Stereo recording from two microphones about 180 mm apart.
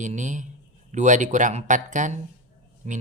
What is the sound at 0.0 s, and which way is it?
Speech, 45° right (ahead or behind).